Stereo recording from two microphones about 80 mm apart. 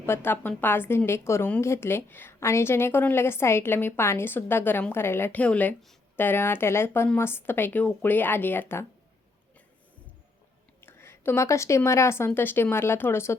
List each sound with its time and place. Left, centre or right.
0.0 s a woman's voice: left
5.4 s a woman's voice: centre
10.8 s a sound: left
11.4 s a woman's voice: left